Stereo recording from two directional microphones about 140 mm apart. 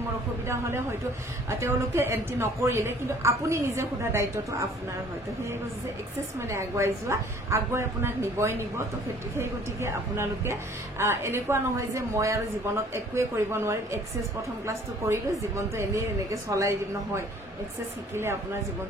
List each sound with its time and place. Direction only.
0.5 s a man's voice: 20° right (ahead or behind)
6.5 s a man's voice: 20° right (ahead or behind)